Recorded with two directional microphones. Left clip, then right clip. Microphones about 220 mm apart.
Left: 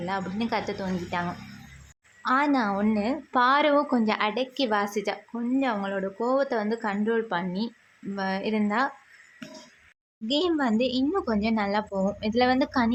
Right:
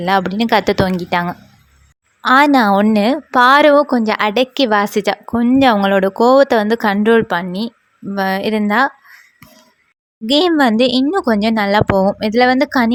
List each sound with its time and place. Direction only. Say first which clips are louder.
0.0 s a woman's voice: right 15 dB; 40° right (ahead or behind)
10.2 s a woman's voice: right 13 dB; 40° right (ahead or behind)